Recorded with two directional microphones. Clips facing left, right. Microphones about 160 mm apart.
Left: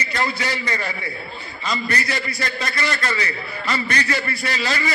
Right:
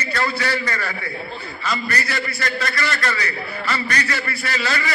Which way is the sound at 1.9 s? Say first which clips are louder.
Even; 20° left (ahead or behind).